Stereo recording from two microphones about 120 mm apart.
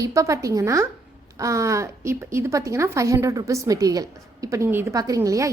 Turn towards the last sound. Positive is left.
turn(degrees=-25)  # may be behind; listen again after turning